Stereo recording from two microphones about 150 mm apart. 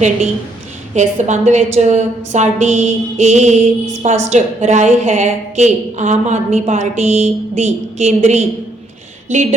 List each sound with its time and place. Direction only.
0.9 s a woman's voice: 50° right (ahead or behind)